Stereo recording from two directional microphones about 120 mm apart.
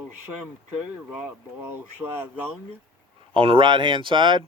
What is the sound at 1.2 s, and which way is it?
Speech, 15° right (ahead or behind).